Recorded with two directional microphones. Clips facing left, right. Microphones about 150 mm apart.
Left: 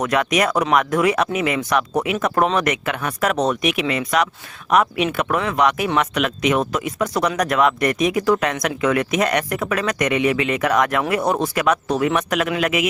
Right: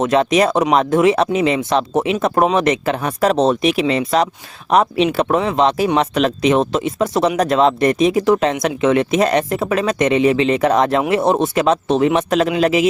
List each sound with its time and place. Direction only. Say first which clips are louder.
0.0 s speech: right 5 dB; 25° right (ahead or behind)